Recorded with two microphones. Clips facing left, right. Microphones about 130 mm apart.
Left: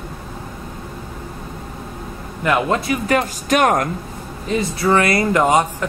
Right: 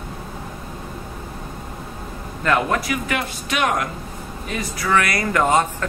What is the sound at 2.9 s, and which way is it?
Speech, 40° left (ahead or behind).